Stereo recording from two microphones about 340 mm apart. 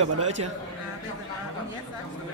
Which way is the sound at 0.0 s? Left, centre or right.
Right.